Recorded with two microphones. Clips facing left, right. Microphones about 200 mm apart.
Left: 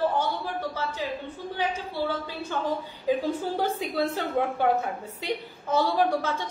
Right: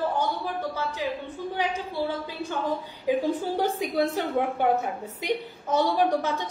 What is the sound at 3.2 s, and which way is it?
A woman's voice, 15° right (ahead or behind).